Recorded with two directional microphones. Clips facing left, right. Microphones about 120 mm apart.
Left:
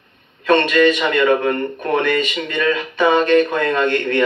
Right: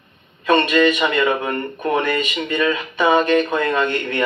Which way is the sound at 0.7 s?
25° right (ahead or behind).